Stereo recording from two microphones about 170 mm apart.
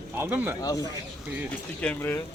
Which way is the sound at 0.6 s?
20° left (ahead or behind).